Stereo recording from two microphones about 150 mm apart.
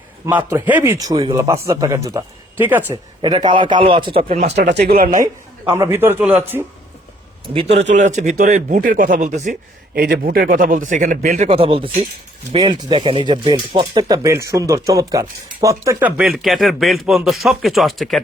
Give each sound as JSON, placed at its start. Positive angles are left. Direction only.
{"t": 0.3, "sound": "a man's voice", "side_deg": -10}
{"t": 2.9, "sound": "a man's voice", "side_deg": -30}
{"t": 4.5, "sound": "speech", "side_deg": -90}
{"t": 5.2, "sound": "a man's voice", "side_deg": -20}
{"t": 7.4, "sound": "speech", "side_deg": -35}
{"t": 9.9, "sound": "speech", "side_deg": -90}
{"t": 11.4, "sound": "a man's voice", "side_deg": -35}